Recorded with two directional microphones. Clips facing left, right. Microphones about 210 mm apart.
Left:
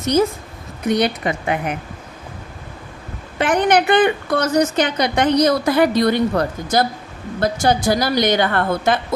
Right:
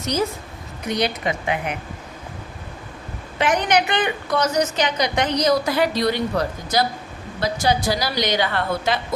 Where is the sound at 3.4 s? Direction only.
55° left (ahead or behind).